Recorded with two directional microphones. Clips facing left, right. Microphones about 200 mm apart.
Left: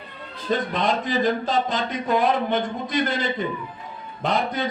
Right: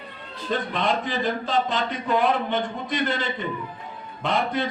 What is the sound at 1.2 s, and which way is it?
Speech, 40° left (ahead or behind).